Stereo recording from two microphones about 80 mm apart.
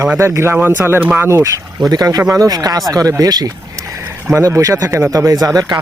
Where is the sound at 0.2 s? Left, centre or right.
Right.